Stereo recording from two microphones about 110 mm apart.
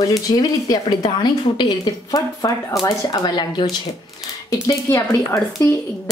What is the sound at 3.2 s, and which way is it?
Speech, 45° left (ahead or behind).